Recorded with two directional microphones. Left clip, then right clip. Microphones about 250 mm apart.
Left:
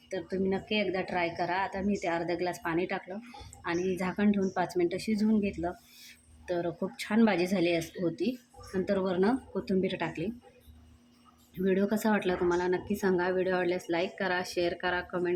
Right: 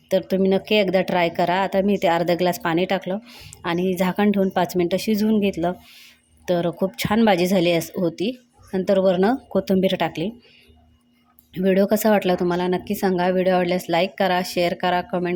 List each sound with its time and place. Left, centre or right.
0.1 s speech: right
11.5 s speech: right